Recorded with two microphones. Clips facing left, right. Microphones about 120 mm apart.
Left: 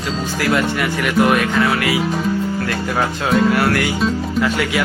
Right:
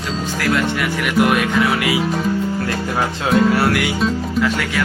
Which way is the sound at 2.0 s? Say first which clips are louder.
Even; centre (ahead or behind).